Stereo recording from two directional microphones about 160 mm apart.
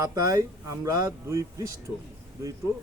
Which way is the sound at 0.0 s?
20° right (ahead or behind).